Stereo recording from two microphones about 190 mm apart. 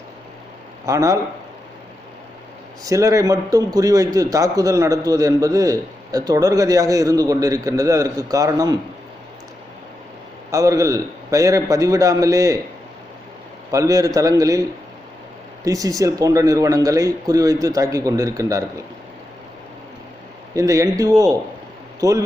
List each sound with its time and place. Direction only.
0.9 s a man's voice: 15° right (ahead or behind)
2.8 s a man's voice: 15° right (ahead or behind)
10.5 s a man's voice: 15° right (ahead or behind)
13.7 s a man's voice: 15° right (ahead or behind)
15.6 s a man's voice: 20° right (ahead or behind)
20.5 s a man's voice: 15° right (ahead or behind)